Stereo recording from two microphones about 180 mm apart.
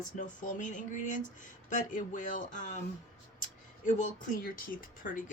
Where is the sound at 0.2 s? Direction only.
45° left (ahead or behind).